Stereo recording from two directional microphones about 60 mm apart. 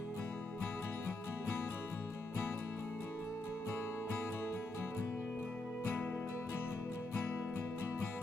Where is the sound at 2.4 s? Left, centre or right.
Left.